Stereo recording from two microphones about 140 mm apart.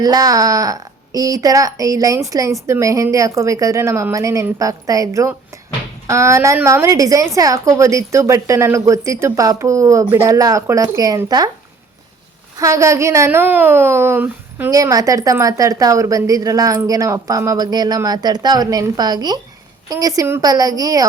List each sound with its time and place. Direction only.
0.0 s a woman's voice: 25° right (ahead or behind)
12.5 s a woman's voice: 20° right (ahead or behind)